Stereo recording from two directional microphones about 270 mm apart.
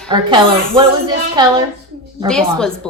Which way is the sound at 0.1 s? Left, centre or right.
Centre.